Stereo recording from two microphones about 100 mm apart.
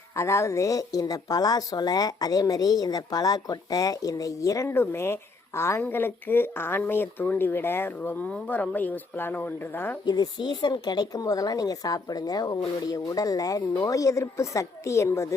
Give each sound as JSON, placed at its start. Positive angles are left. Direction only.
{"t": 0.2, "sound": "speech", "side_deg": 30}
{"t": 10.1, "sound": "speech", "side_deg": 45}